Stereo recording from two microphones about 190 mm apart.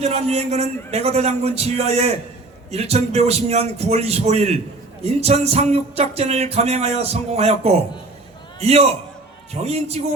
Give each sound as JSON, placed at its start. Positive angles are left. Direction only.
{"t": 0.0, "sound": "music", "side_deg": -35}
{"t": 8.5, "sound": "a man's voice", "side_deg": -35}
{"t": 9.5, "sound": "music", "side_deg": -35}